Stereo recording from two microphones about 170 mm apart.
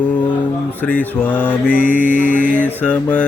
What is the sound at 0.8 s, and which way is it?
Mantra, 10° left (ahead or behind).